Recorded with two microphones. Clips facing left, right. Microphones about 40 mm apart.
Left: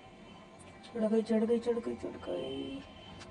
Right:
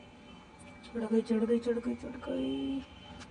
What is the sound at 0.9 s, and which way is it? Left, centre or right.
A man's voice, centre.